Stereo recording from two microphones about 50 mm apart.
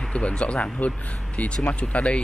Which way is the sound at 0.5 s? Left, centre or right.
Centre.